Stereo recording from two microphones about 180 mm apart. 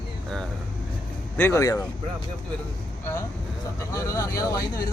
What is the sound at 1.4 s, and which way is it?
Speech, 15° left (ahead or behind).